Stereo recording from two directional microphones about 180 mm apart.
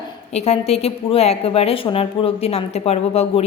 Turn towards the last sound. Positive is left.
turn(degrees=35)  # may be behind; listen again after turning